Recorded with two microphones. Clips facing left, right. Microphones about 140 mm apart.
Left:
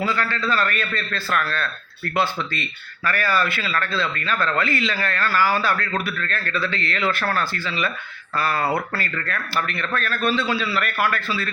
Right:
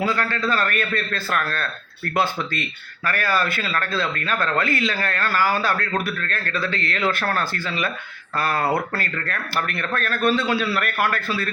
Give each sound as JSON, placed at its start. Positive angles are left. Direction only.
{"t": 0.2, "sound": "speech", "side_deg": -45}